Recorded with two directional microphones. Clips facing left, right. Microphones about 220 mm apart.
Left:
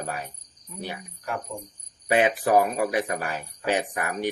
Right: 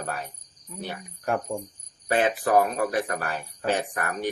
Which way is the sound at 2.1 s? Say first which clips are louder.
Left 1 dB; 10° left (ahead or behind).